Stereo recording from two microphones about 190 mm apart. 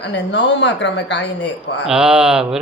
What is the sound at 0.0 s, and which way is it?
A woman's voice, 65° left (ahead or behind).